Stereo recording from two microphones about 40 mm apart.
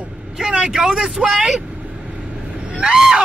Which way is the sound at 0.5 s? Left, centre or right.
Centre.